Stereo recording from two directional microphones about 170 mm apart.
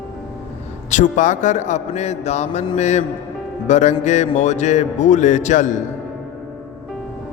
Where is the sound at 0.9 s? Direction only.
45° left (ahead or behind).